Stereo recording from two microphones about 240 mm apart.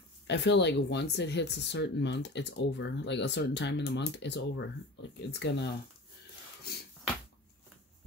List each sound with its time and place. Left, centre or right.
0.3 s speech: left